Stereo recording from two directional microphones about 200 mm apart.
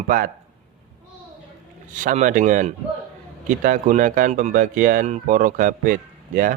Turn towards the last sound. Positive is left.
turn(degrees=-40)  # may be behind; listen again after turning